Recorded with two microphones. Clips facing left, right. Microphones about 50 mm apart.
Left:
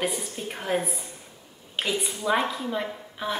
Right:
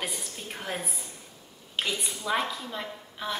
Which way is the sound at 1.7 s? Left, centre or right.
Centre.